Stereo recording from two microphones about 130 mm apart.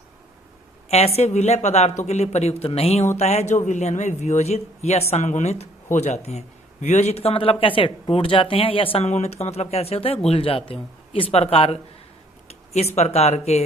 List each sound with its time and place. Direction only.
0.9 s speech: 55° left (ahead or behind)
12.5 s a sound: 55° left (ahead or behind)
13.0 s speech: 55° left (ahead or behind)